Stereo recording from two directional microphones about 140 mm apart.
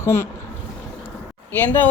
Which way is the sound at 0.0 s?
20° left (ahead or behind).